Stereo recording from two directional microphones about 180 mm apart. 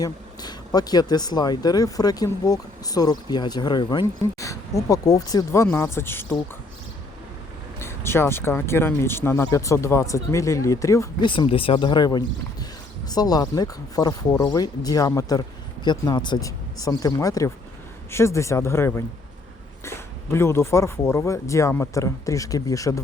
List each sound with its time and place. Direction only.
0.0 s speech: 20° left (ahead or behind)
7.8 s speech: 15° left (ahead or behind)